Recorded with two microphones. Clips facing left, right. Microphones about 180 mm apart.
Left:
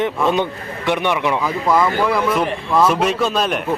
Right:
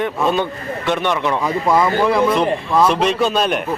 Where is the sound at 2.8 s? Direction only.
5° left (ahead or behind).